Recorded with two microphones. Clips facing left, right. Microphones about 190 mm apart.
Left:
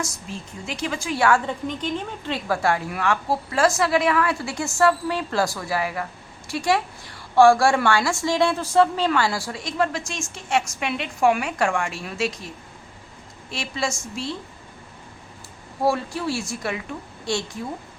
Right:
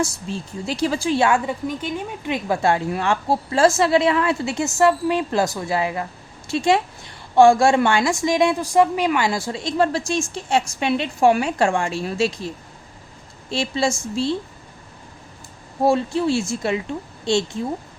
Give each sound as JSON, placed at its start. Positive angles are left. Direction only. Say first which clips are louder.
{"t": 0.0, "sound": "a woman's voice", "louder": "right 7 dB", "side_deg": -30}
{"t": 1.5, "sound": "a woman's voice", "louder": "right 2 dB", "side_deg": -10}
{"t": 13.5, "sound": "a woman's voice", "louder": "right 6 dB", "side_deg": -30}
{"t": 15.8, "sound": "a woman's voice", "louder": "right 5 dB", "side_deg": -25}